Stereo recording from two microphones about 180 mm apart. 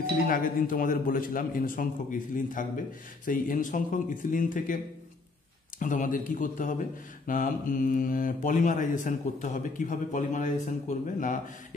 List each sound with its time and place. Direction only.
0.3 s speech: 50° left (ahead or behind)
5.8 s speech: 45° left (ahead or behind)